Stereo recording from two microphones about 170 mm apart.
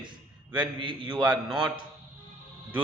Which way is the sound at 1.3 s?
5° right (ahead or behind).